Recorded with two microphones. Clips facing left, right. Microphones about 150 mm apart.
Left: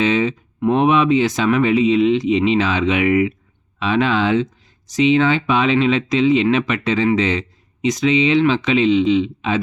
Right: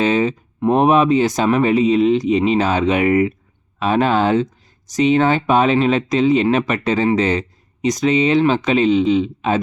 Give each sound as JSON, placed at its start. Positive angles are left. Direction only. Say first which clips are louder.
{"t": 0.0, "sound": "speech", "louder": "right 1 dB", "side_deg": -40}